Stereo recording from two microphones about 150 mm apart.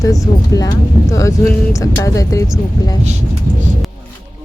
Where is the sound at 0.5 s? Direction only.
20° left (ahead or behind).